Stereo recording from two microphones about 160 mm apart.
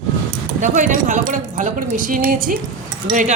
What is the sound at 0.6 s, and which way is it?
A woman's voice, 50° right (ahead or behind).